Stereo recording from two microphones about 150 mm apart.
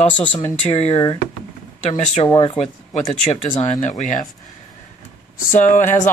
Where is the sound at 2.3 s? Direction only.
25° left (ahead or behind).